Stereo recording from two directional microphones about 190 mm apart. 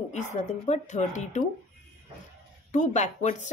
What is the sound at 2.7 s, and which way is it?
Speech, 40° left (ahead or behind).